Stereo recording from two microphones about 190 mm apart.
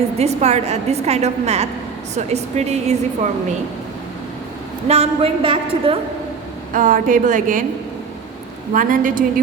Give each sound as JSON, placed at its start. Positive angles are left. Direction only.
{"t": 0.2, "sound": "a woman's voice", "side_deg": -35}
{"t": 4.9, "sound": "a woman's voice", "side_deg": -30}
{"t": 6.7, "sound": "speech", "side_deg": -45}
{"t": 8.7, "sound": "speech", "side_deg": -45}